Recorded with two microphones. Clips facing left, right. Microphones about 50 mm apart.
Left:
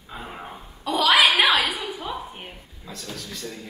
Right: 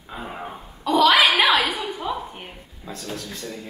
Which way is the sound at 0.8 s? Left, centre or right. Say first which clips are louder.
Right 2 dB; centre.